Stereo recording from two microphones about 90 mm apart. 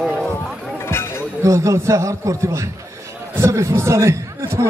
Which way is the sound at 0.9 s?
25° left (ahead or behind).